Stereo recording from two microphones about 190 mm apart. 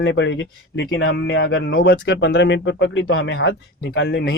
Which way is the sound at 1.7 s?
65° left (ahead or behind).